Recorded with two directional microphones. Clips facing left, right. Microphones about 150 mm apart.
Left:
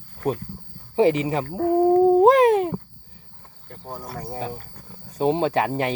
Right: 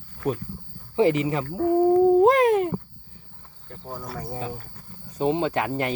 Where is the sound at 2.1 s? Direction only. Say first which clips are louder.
Left 2 dB; 25° left (ahead or behind).